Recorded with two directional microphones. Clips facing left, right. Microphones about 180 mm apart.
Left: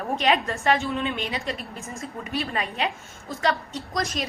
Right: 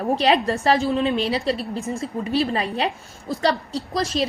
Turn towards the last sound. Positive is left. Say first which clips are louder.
# right 5 dB
turn(degrees=-30)  # may be behind; listen again after turning